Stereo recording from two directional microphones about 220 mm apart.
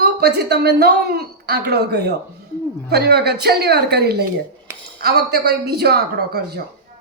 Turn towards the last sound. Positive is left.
turn(degrees=-45)  # may be behind; listen again after turning